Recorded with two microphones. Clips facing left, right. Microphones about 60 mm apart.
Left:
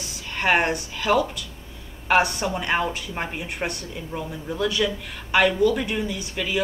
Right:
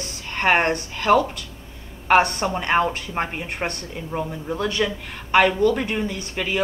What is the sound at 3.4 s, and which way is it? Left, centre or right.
Speech, right.